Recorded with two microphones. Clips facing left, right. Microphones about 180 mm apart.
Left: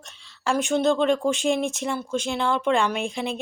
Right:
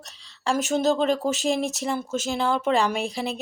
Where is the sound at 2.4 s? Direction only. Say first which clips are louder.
Even; 5° right (ahead or behind).